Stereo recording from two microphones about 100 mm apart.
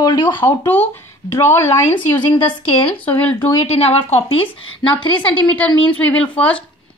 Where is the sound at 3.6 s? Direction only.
90° left.